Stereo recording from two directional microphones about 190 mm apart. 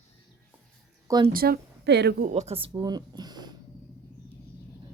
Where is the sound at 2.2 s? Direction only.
35° right (ahead or behind).